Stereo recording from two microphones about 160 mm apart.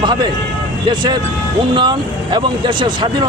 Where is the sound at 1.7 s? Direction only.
30° right (ahead or behind).